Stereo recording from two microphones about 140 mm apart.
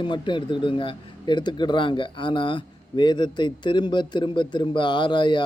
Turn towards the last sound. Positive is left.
turn(degrees=35)  # may be behind; listen again after turning